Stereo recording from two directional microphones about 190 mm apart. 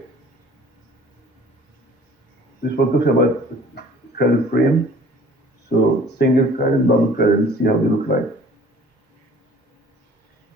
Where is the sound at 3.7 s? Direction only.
60° left (ahead or behind).